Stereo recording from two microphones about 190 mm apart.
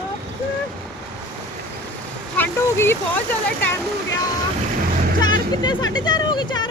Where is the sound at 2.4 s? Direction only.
10° left (ahead or behind).